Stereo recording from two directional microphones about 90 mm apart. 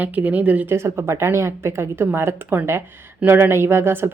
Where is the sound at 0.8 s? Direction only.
30° right (ahead or behind).